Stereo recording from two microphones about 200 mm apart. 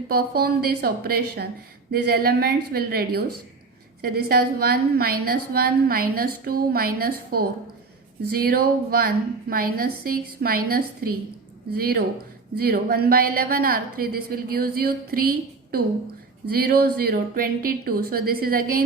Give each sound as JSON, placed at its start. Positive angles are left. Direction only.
{"t": 0.1, "sound": "a woman's voice", "side_deg": -50}